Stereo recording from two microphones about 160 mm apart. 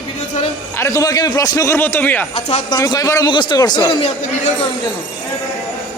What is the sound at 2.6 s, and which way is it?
A man's voice, 25° left (ahead or behind).